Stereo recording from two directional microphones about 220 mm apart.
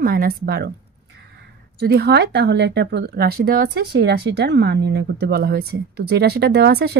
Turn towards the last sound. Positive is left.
turn(degrees=-45)  # may be behind; listen again after turning